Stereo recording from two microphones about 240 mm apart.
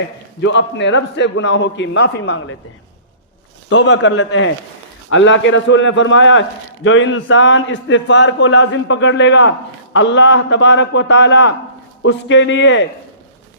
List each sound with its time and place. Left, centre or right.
0.4 s a man's voice: left
3.7 s a man's voice: left